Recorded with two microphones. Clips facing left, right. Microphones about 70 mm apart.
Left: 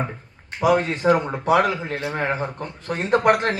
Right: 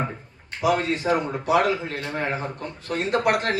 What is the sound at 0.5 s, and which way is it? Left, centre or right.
Speech, centre.